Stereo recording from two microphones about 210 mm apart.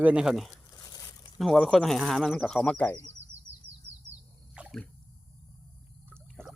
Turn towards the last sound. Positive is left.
turn(degrees=5)  # may be behind; listen again after turning